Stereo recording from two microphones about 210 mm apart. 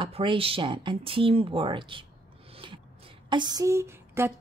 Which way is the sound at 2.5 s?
25° right (ahead or behind).